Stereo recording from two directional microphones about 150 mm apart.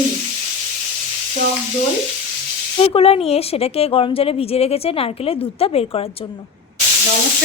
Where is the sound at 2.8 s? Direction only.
40° left (ahead or behind).